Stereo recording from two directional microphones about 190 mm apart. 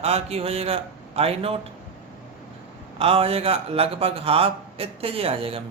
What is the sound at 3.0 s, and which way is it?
A man's voice, 30° right (ahead or behind).